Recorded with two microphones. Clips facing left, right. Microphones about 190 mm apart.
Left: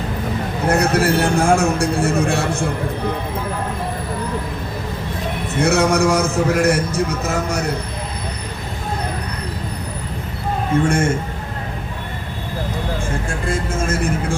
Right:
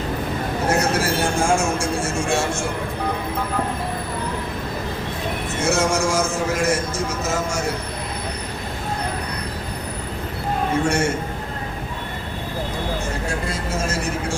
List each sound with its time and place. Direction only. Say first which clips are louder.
0.7 s a man's voice: left 5 dB; 60° left (ahead or behind)
5.5 s a man's voice: left 5 dB; 60° left (ahead or behind)
10.8 s speech: left 2 dB; 55° left (ahead or behind)
13.2 s speech: left 3 dB; 50° left (ahead or behind)